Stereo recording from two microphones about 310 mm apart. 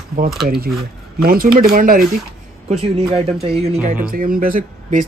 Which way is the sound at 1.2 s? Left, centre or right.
Right.